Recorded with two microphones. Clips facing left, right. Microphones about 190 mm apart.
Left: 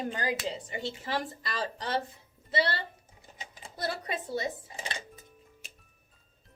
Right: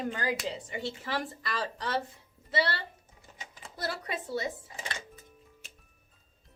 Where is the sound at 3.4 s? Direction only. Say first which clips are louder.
Left 2 dB; 25° left (ahead or behind).